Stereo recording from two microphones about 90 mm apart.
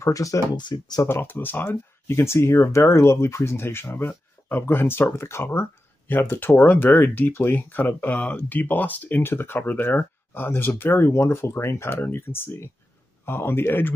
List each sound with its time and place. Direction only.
0.0 s speech: 40° left (ahead or behind)
0.6 s speech: 50° left (ahead or behind)
1.0 s speech: 25° left (ahead or behind)